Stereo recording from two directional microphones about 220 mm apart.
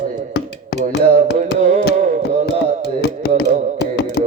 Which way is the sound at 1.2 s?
30° right (ahead or behind).